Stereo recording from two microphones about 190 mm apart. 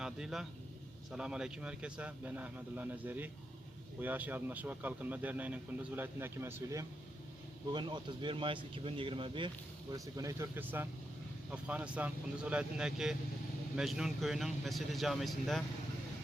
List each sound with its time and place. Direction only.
0.0 s speech: 5° right (ahead or behind)